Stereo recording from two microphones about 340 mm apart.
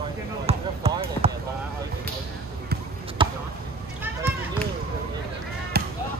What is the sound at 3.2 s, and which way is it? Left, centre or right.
Basketball bounce, centre.